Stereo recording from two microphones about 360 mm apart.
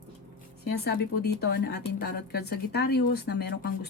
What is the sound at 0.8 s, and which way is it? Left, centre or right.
Speech, left.